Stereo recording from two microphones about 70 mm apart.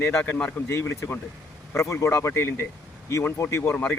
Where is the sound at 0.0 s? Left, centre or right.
Left.